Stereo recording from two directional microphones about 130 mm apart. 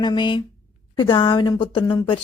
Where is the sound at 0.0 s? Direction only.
35° left (ahead or behind).